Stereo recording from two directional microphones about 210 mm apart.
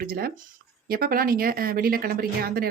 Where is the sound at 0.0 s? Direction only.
45° right (ahead or behind).